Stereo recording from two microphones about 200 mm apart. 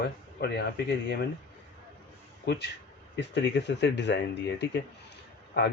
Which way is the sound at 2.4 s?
55° left (ahead or behind).